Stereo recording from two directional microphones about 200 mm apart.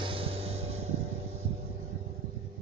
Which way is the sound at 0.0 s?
25° right (ahead or behind).